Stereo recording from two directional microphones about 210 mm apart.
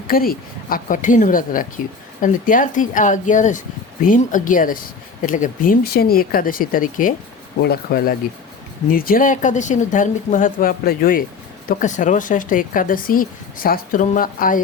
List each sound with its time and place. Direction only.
0.1 s speech: 45° left (ahead or behind)